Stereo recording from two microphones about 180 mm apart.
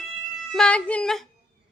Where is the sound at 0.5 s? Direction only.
5° left (ahead or behind).